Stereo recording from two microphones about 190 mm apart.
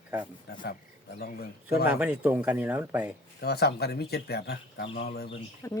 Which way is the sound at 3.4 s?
60° left (ahead or behind).